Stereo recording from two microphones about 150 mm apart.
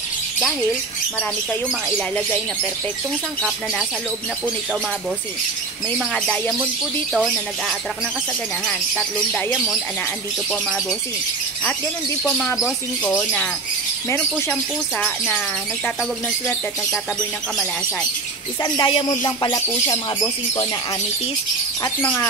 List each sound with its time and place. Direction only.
0.4 s speech: centre (ahead or behind)
5.9 s speech: 5° left (ahead or behind)
8.6 s speech: 5° left (ahead or behind)
12.2 s speech: 10° left (ahead or behind)
14.1 s speech: 10° left (ahead or behind)
18.6 s speech: 30° left (ahead or behind)
22.0 s speech: 10° left (ahead or behind)